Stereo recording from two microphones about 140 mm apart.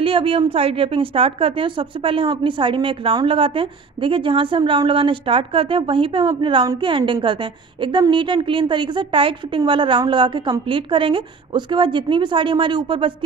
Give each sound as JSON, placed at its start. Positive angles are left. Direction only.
{"t": 0.0, "sound": "a woman's voice", "side_deg": -40}